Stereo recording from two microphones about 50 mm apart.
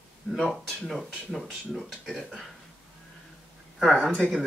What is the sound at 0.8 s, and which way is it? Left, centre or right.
Speech, centre.